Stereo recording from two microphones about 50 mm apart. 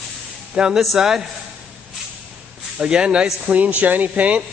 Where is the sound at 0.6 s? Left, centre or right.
Centre.